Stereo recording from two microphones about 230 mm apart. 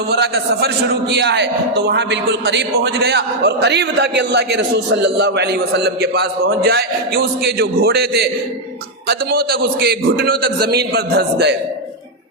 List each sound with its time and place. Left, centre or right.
0.1 s a man's voice: right